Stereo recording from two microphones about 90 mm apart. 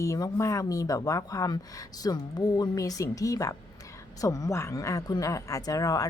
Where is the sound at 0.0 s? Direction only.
35° left (ahead or behind).